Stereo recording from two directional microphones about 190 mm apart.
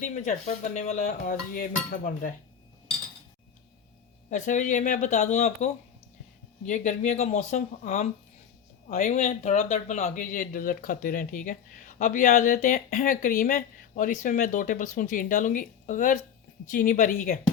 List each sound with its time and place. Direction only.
0.0 s speech: 40° left (ahead or behind)
4.3 s speech: 40° left (ahead or behind)